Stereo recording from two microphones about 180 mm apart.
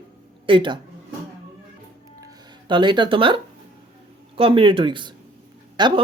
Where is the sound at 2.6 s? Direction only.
25° right (ahead or behind).